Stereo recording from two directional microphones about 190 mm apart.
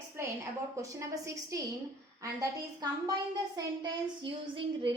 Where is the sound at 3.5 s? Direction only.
25° right (ahead or behind).